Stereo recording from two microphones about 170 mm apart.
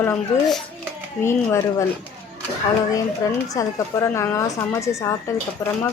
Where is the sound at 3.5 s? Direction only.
20° left (ahead or behind).